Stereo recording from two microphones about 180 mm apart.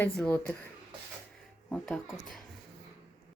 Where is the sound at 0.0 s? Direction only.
10° left (ahead or behind).